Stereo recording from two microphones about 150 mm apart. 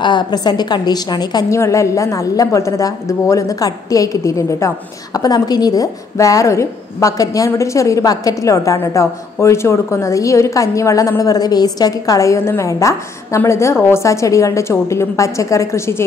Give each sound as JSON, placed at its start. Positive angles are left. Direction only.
{"t": 0.0, "sound": "a woman's voice", "side_deg": 30}